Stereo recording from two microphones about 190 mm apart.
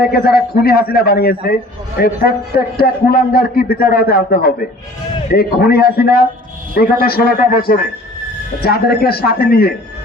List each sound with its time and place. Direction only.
0.0 s a man's voice: 50° left (ahead or behind)